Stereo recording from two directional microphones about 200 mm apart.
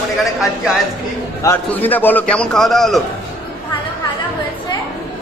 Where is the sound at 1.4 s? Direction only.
10° left (ahead or behind).